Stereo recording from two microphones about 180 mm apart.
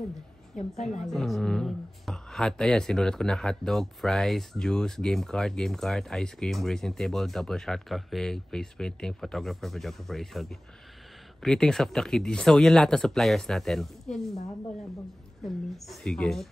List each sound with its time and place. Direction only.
0.6 s a woman's voice: 40° left (ahead or behind)
1.0 s speech: centre (ahead or behind)
15.4 s speech: centre (ahead or behind)